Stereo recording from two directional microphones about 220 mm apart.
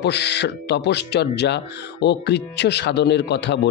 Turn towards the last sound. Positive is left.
turn(degrees=50)  # may be behind; listen again after turning